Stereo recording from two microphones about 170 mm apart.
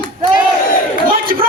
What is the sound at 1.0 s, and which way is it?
Speech, 55° right (ahead or behind).